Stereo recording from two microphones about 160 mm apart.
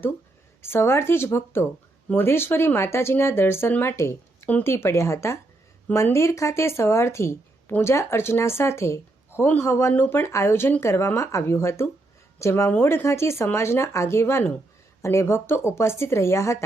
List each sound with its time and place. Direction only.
0.6 s a woman's voice: 15° left (ahead or behind)